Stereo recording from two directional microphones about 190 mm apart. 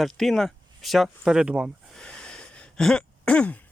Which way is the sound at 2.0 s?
5° left (ahead or behind).